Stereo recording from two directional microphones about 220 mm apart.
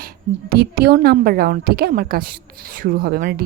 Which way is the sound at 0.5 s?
45° right (ahead or behind).